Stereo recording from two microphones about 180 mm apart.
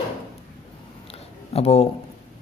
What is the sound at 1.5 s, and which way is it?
Speech, 35° left (ahead or behind).